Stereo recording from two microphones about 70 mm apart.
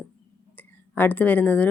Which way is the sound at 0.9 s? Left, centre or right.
Left.